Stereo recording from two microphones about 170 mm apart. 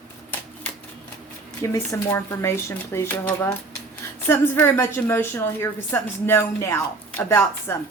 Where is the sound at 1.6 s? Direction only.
20° left (ahead or behind).